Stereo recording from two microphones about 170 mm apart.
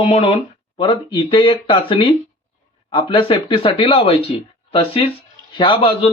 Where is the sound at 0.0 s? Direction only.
35° left (ahead or behind).